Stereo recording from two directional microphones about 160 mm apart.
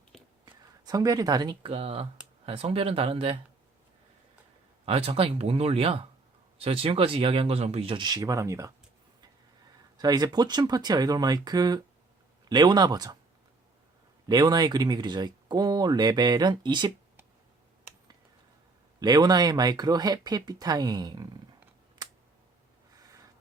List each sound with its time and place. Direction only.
0.4 s speech: 25° right (ahead or behind)
4.9 s speech: 35° right (ahead or behind); by 8.7 s 20° right (ahead or behind)
10.0 s speech: 25° right (ahead or behind)
14.3 s speech: 25° right (ahead or behind)
18.9 s speech: 25° right (ahead or behind)